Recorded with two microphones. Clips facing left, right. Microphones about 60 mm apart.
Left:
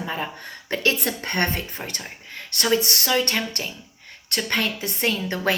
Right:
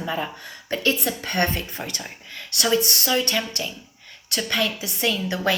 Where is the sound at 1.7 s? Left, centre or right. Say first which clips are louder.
Right 1 dB; left.